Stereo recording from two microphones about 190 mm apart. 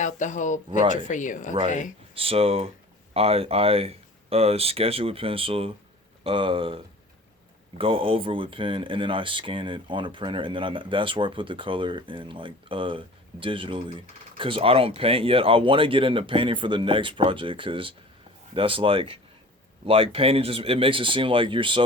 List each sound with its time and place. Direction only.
0.0 s speech: 40° left (ahead or behind)
2.1 s speech: 30° right (ahead or behind)